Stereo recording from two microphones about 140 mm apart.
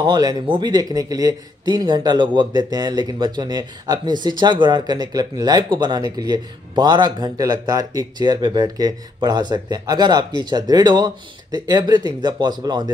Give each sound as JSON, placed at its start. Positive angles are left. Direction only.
{"t": 0.0, "sound": "a man's voice", "side_deg": -30}